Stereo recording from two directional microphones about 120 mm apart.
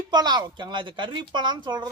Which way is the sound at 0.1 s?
35° right (ahead or behind).